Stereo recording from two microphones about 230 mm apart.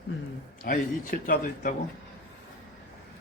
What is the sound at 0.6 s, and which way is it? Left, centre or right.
A man's voice, left.